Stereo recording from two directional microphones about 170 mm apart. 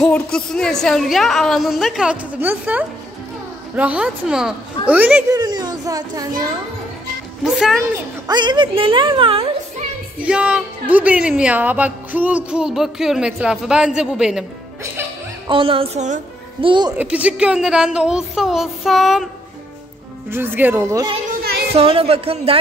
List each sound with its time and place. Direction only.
0.0 s speech: 5° left (ahead or behind)
5.3 s speech: 25° right (ahead or behind)
7.4 s speech: centre (ahead or behind)
8.3 s speech: 25° right (ahead or behind)
10.2 s speech: 5° right (ahead or behind)
15.4 s speech: 30° right (ahead or behind)
16.6 s speech: 25° right (ahead or behind)
17.0 s speech: 10° right (ahead or behind)
20.2 s speech: 15° right (ahead or behind)
21.7 s speech: 35° right (ahead or behind)